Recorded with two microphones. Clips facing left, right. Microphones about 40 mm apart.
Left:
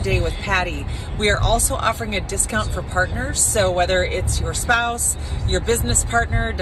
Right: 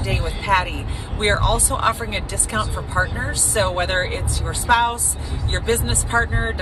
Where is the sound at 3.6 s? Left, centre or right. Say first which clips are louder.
Left 4 dB; right.